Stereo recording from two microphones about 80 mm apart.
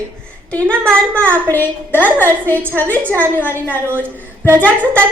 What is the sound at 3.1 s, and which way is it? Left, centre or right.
Speech, right.